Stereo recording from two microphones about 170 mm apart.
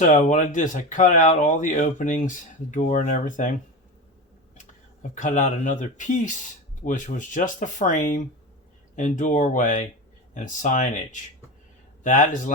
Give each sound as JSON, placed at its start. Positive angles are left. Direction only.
{"t": 0.0, "sound": "speech", "side_deg": 45}
{"t": 5.1, "sound": "speech", "side_deg": 45}